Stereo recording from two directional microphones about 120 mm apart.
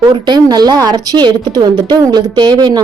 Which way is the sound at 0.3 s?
35° right (ahead or behind).